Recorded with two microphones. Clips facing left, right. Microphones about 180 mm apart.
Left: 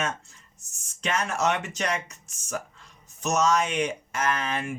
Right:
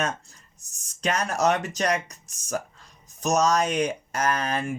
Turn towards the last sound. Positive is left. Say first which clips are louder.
# right 2 dB
turn(degrees=-40)  # may be behind; listen again after turning